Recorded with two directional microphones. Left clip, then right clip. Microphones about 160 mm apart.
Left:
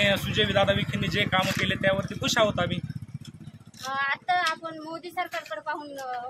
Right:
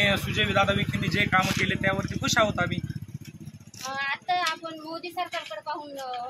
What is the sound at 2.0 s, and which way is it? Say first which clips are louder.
Speech: right 1 dB; 30° left (ahead or behind).